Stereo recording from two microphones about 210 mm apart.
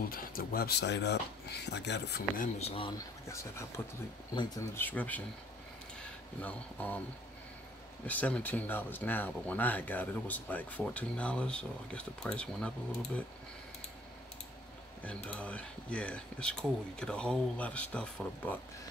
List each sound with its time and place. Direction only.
0.1 s speech: 45° left (ahead or behind)
2.7 s speech: 25° left (ahead or behind)
3.3 s speech: 15° left (ahead or behind)
6.4 s speech: 10° left (ahead or behind)
8.1 s speech: 5° left (ahead or behind)
15.2 s speech: 5° left (ahead or behind)